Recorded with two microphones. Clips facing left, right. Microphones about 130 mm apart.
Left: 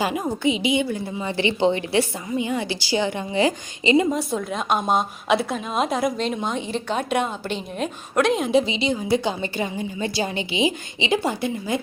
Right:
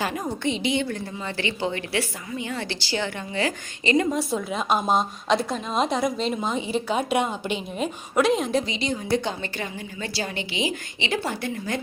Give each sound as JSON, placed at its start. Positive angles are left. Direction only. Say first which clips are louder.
{"t": 0.0, "sound": "a woman's voice", "louder": "left 4 dB", "side_deg": 15}
{"t": 0.3, "sound": "a woman's voice", "louder": "left 3 dB", "side_deg": 5}
{"t": 4.1, "sound": "a woman's voice", "louder": "left 1 dB", "side_deg": 0}
{"t": 8.5, "sound": "a woman's voice", "louder": "left 5 dB", "side_deg": 25}
{"t": 8.9, "sound": "a woman's voice", "louder": "left 3 dB", "side_deg": 5}
{"t": 9.4, "sound": "a woman's voice", "louder": "left 6 dB", "side_deg": 20}